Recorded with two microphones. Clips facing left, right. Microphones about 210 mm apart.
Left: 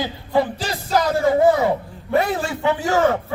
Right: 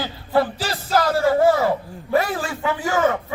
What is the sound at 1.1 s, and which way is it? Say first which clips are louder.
A man's voice: left 1 dB; 15° left (ahead or behind).